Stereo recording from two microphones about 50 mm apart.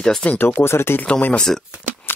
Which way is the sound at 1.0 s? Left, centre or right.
Left.